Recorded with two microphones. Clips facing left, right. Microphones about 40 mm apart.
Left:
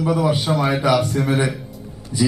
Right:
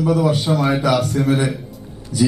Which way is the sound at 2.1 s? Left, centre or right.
Left.